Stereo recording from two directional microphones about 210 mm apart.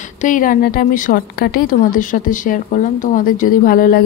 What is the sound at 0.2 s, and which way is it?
A woman's voice, 40° left (ahead or behind).